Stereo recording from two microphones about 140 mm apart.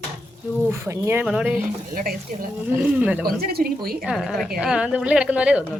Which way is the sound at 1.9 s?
85° right.